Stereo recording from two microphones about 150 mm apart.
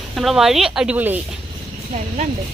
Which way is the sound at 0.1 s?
Centre (ahead or behind).